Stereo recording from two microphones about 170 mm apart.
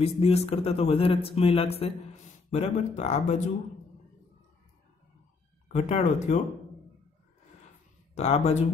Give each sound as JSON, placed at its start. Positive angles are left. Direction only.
{"t": 0.0, "sound": "a man's voice", "side_deg": 40}
{"t": 5.7, "sound": "speech", "side_deg": 40}
{"t": 8.1, "sound": "speech", "side_deg": 40}